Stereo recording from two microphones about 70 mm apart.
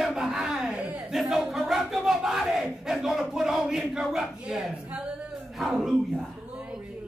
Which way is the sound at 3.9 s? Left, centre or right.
Centre.